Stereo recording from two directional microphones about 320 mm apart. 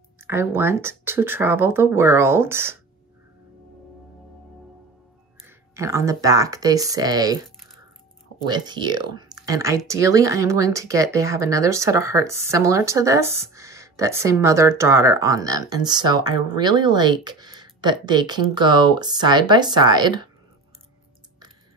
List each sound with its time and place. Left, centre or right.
0.2 s speech: centre
5.8 s speech: centre
8.5 s speech: centre